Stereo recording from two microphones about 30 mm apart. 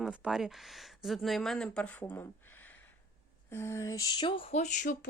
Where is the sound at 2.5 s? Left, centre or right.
Left.